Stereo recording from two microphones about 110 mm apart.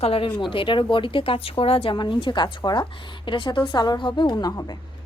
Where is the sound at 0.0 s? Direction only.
60° left (ahead or behind); by 4.8 s 40° left (ahead or behind).